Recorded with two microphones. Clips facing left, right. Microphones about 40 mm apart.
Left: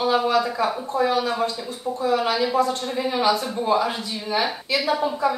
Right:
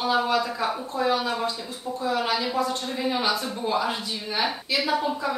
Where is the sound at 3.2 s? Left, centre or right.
Left.